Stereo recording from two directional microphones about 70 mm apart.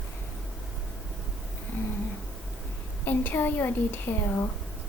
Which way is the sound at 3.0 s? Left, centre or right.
Left.